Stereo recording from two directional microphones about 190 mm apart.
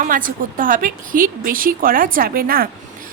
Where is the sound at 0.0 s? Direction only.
45° right (ahead or behind).